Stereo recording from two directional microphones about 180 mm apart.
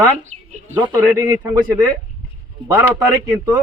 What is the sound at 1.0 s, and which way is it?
Speech, 15° right (ahead or behind).